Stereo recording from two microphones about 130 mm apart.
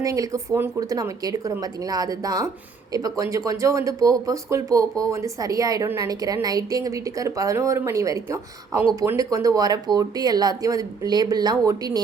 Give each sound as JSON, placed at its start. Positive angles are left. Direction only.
{"t": 0.0, "sound": "speech", "side_deg": -25}